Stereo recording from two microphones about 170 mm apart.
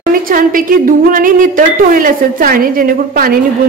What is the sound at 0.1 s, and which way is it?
A woman's voice, 55° right (ahead or behind).